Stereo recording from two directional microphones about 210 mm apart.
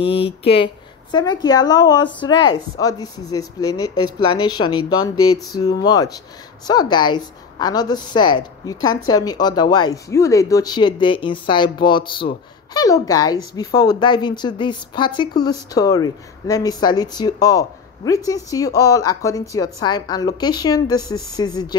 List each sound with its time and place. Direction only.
0.0 s a woman's voice: 25° left (ahead or behind)